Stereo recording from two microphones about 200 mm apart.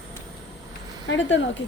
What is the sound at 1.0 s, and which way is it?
Speech, 65° left (ahead or behind).